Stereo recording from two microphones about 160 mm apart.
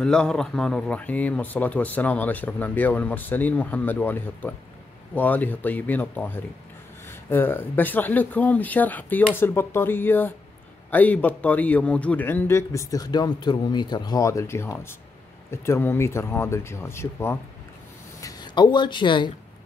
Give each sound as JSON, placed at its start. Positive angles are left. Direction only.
{"t": 0.0, "sound": "speech", "side_deg": 5}
{"t": 18.2, "sound": "speech", "side_deg": 25}